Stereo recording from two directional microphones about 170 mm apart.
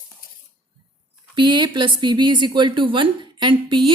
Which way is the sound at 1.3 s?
25° right (ahead or behind).